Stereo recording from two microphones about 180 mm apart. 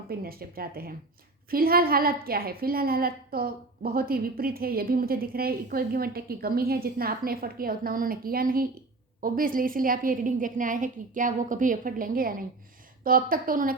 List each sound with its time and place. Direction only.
0.1 s a woman's voice: 55° right (ahead or behind)